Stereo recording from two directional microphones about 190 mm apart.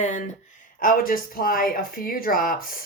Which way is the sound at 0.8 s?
45° left (ahead or behind).